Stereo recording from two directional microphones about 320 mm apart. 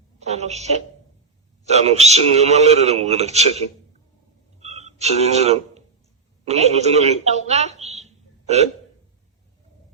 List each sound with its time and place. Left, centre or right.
0.2 s a woman's voice: right
4.6 s a sound: right
6.4 s a man's voice: centre